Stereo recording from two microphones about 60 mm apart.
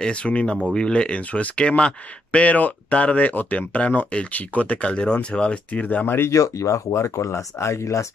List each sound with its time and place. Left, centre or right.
0.0 s speech: centre
6.3 s speech: left